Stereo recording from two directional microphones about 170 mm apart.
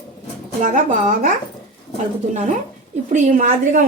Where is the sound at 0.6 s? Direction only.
50° right (ahead or behind).